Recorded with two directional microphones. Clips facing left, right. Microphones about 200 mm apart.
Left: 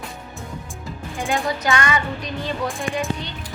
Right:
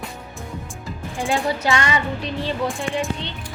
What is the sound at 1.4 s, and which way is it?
Music, 30° right (ahead or behind).